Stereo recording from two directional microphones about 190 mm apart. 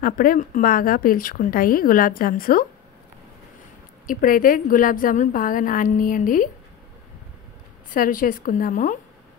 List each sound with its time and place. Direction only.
0.0 s a woman's voice: 45° left (ahead or behind)
4.1 s a woman's voice: 45° left (ahead or behind)
7.9 s a woman's voice: 45° left (ahead or behind)